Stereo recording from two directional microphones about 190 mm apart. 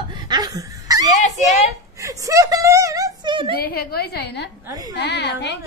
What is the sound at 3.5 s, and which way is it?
A woman's voice, 50° left (ahead or behind).